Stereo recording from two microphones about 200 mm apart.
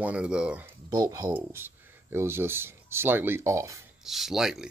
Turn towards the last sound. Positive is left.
turn(degrees=0)  # may be behind; listen again after turning